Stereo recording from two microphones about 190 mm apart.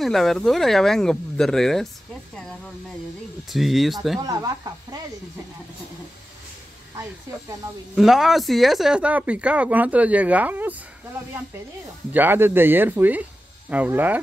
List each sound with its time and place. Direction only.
0.0 s speech: centre (ahead or behind)
4.2 s speech: 20° right (ahead or behind)
7.9 s speech: centre (ahead or behind)
12.1 s speech: 10° right (ahead or behind)